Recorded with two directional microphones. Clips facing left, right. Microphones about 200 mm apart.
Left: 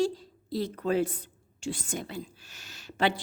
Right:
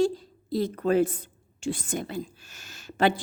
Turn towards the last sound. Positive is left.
turn(degrees=-45)  # may be behind; listen again after turning